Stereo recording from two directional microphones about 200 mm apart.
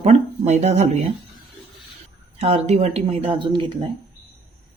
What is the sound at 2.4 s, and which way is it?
Speech, 30° right (ahead or behind).